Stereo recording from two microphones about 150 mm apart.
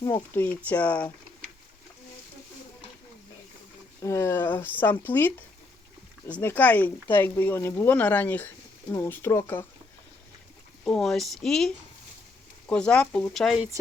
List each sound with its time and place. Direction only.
0.3 s speech: 10° left (ahead or behind)
4.0 s speech: 20° left (ahead or behind)
6.4 s speech: 10° left (ahead or behind)
10.8 s speech: 5° left (ahead or behind)